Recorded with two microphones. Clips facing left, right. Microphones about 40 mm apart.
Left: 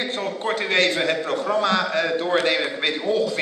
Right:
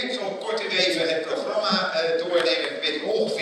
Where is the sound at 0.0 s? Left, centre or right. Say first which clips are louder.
Left 2 dB; left.